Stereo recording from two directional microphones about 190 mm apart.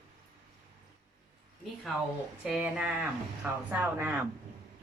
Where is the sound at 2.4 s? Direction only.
5° right (ahead or behind).